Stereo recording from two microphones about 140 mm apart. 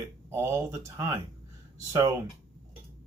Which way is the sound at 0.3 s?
20° right (ahead or behind).